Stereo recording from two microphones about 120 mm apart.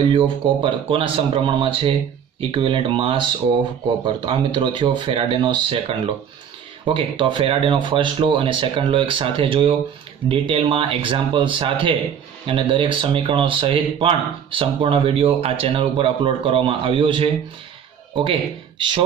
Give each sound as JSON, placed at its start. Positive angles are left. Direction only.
{"t": 0.1, "sound": "speech", "side_deg": -45}